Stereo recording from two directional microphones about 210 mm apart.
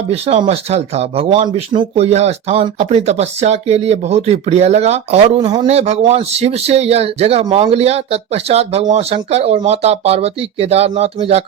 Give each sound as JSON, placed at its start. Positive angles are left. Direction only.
{"t": 0.1, "sound": "a man's voice", "side_deg": -30}